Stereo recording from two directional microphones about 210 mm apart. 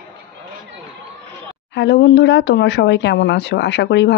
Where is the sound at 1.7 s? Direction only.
55° left (ahead or behind).